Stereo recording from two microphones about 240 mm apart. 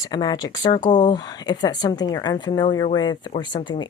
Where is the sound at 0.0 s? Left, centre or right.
Centre.